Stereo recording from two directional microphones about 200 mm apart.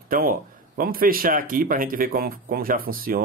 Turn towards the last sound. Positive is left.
turn(degrees=-45)  # may be behind; listen again after turning